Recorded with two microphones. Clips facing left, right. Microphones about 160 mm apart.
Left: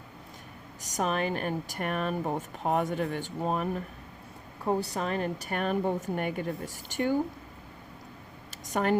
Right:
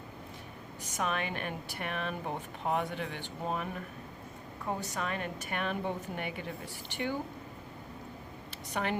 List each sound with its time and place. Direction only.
0.8 s speech: 40° left (ahead or behind)
8.7 s speech: 45° left (ahead or behind)